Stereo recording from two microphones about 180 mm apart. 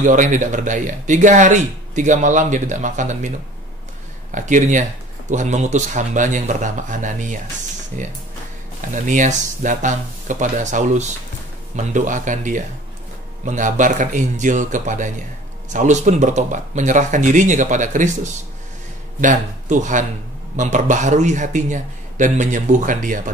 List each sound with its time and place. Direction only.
0.0 s speech: 45° right (ahead or behind)